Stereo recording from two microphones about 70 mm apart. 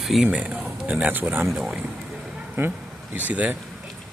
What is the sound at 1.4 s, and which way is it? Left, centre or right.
Speech, centre.